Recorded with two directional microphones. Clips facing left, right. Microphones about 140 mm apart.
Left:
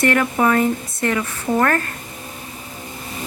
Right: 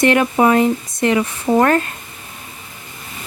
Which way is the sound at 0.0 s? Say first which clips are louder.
Right 4 dB; 20° right (ahead or behind).